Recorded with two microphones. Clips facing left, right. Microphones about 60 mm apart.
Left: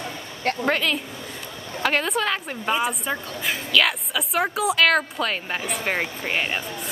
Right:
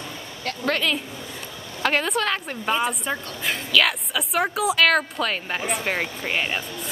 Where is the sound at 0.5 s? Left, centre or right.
Left.